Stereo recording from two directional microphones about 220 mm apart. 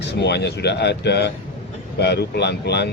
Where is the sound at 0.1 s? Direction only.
50° left (ahead or behind).